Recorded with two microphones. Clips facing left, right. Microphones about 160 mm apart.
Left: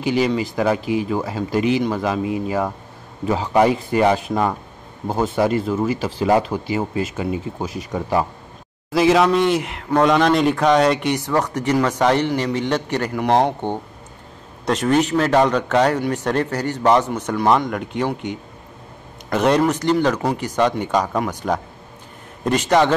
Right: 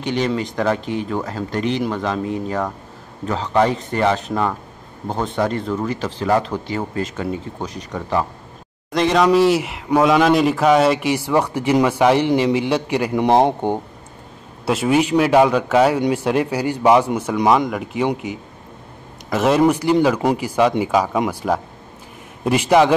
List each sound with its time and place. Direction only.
0.0 s a man's voice: 5° left (ahead or behind); by 12.3 s 10° right (ahead or behind)
12.3 s a man's voice: 20° right (ahead or behind)
12.5 s a man's voice: 10° right (ahead or behind)
19.2 s a man's voice: centre (ahead or behind)